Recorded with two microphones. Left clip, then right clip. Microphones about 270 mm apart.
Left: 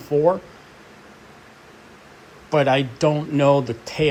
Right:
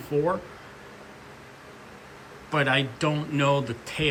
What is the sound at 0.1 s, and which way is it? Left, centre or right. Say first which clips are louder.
Speech: left 7 dB; centre.